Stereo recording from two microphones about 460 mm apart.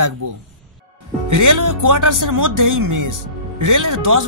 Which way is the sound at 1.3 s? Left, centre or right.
Right.